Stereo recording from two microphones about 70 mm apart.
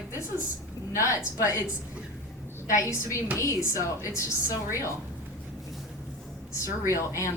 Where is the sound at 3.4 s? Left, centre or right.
Left.